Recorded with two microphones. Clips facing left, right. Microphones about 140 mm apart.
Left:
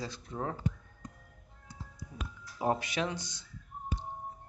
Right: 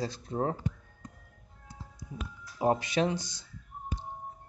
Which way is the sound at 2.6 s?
30° right (ahead or behind).